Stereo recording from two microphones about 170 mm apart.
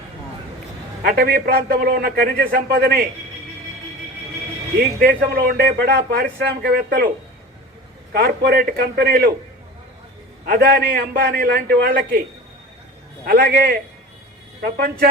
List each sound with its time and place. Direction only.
1.0 s a man's voice: 65° right (ahead or behind)
4.8 s a man's voice: 65° right (ahead or behind)
8.1 s a man's voice: 65° right (ahead or behind)
10.4 s a man's voice: 60° right (ahead or behind)
13.2 s a man's voice: 60° right (ahead or behind)